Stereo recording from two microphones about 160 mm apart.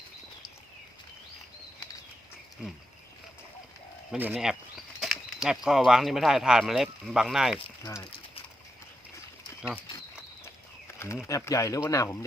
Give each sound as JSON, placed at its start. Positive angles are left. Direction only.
{"t": 4.1, "sound": "speech", "side_deg": -5}
{"t": 4.9, "sound": "bird flight", "side_deg": 0}
{"t": 5.6, "sound": "speech", "side_deg": -5}
{"t": 11.3, "sound": "speech", "side_deg": 20}